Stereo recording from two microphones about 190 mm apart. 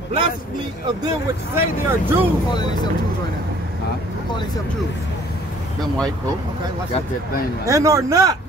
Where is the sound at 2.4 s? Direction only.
20° left (ahead or behind).